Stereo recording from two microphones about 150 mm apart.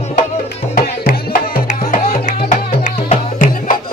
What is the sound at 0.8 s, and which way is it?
Music, 85° left.